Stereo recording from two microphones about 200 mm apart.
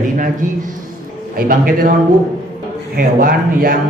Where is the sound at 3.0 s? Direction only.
45° right (ahead or behind).